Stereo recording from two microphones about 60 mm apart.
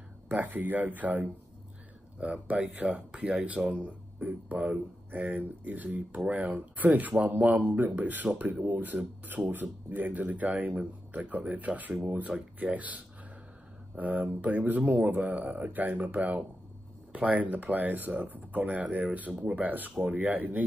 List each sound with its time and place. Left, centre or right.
0.3 s speech: right